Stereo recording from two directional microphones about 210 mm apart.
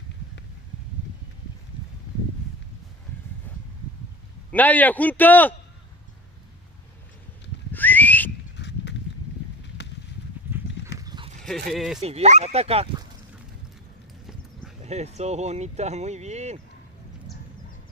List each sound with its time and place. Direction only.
4.5 s a man's voice: 10° left (ahead or behind)
7.7 s whistling: 10° left (ahead or behind)
8.5 s horse: 55° left (ahead or behind)
11.0 s horse: 20° right (ahead or behind)
11.7 s speech: centre (ahead or behind)
12.0 s speech: 30° right (ahead or behind)
14.8 s speech: 30° right (ahead or behind)